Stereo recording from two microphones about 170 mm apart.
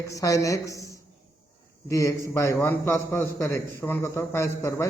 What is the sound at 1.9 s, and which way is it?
A man's voice, 15° left (ahead or behind).